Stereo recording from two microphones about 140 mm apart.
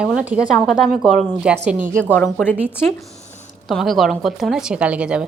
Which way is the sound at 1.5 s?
10° right (ahead or behind).